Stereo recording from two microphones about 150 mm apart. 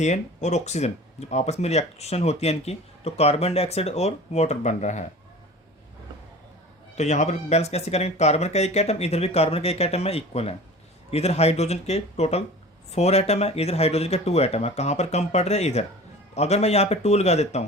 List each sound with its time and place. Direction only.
0.0 s speech: 50° left (ahead or behind)
6.9 s speech: 50° left (ahead or behind)